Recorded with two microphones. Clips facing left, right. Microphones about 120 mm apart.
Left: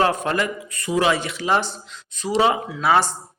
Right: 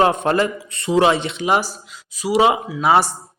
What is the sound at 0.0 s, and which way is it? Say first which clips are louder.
A man's voice: right 4 dB; 20° right (ahead or behind).